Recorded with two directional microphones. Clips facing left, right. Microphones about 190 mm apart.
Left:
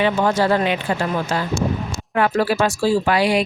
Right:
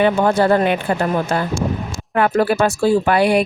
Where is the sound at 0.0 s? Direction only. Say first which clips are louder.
Right 3 dB; 50° right (ahead or behind).